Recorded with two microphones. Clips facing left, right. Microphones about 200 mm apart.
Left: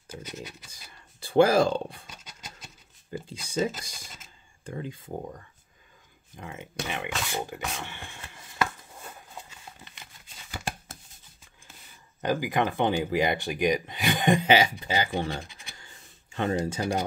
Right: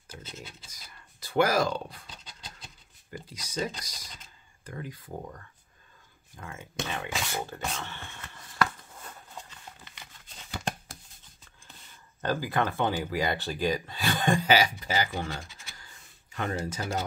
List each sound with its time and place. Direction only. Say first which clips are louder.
1.2 s speech: left 5 dB; 30° left (ahead or behind)
2.0 s pant: left 1 dB; 10° left (ahead or behind)
3.1 s speech: left 5 dB; 30° left (ahead or behind)
6.3 s a sound: left 1 dB; 20° left (ahead or behind)
12.2 s speech: left 2 dB; 15° left (ahead or behind)